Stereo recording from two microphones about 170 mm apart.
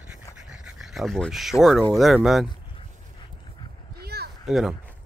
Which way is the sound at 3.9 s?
70° right (ahead or behind).